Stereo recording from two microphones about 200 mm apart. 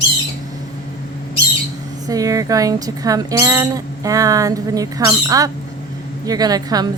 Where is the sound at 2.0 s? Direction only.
15° right (ahead or behind).